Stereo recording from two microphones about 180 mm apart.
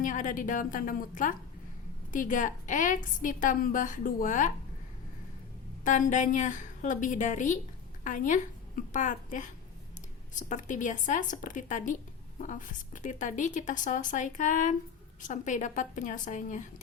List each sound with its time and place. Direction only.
0.0 s a woman's voice: 45° left (ahead or behind)
5.8 s a woman's voice: 45° left (ahead or behind)